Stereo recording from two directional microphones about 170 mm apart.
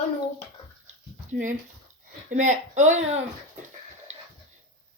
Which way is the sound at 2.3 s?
45° right (ahead or behind).